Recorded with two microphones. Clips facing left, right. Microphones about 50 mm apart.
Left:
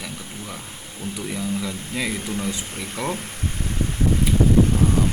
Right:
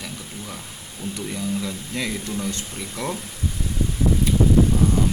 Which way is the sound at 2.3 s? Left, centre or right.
Left.